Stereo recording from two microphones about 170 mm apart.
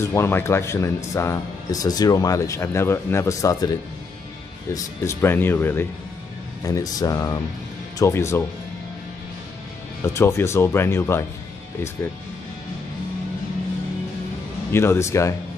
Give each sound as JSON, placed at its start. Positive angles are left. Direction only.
{"t": 0.0, "sound": "speech", "side_deg": 15}
{"t": 4.7, "sound": "speech", "side_deg": 15}
{"t": 10.0, "sound": "speech", "side_deg": 15}
{"t": 14.7, "sound": "speech", "side_deg": 15}